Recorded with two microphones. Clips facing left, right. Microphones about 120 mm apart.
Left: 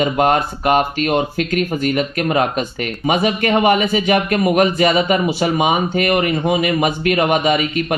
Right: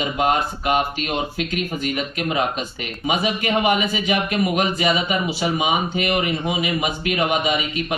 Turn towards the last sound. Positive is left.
turn(degrees=50)  # may be behind; listen again after turning